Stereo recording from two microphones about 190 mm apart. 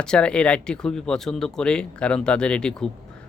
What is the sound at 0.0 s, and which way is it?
Speech, 5° left (ahead or behind).